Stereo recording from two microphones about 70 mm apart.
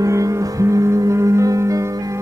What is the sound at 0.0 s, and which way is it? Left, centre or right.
Music, right.